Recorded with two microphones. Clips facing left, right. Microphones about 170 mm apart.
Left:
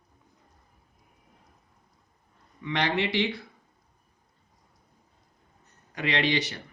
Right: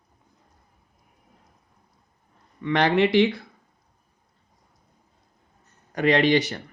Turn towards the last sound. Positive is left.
turn(degrees=-50)  # may be behind; listen again after turning